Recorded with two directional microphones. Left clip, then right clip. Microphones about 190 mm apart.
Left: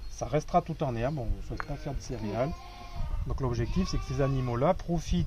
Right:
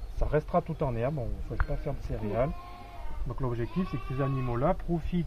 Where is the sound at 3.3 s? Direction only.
20° left (ahead or behind).